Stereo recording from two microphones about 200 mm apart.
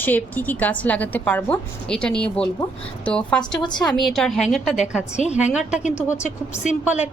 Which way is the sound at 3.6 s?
20° left (ahead or behind).